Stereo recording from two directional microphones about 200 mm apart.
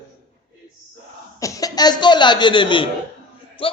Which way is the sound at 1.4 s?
15° left (ahead or behind).